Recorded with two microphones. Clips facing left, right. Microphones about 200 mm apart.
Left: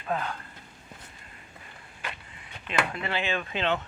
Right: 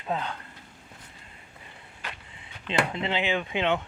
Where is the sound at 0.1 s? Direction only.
20° right (ahead or behind).